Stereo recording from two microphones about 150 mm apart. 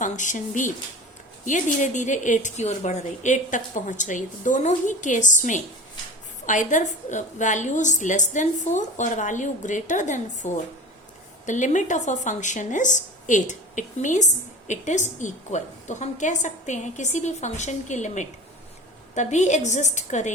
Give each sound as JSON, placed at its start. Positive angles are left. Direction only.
{"t": 0.0, "sound": "a woman's voice", "side_deg": 55}